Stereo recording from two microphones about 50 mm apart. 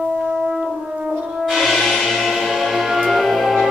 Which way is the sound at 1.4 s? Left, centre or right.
Centre.